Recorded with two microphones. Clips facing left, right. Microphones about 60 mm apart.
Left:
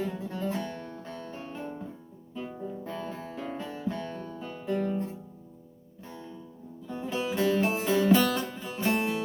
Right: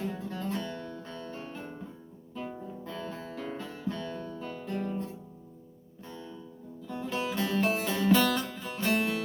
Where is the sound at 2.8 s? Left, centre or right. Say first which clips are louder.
Right 1 dB; left.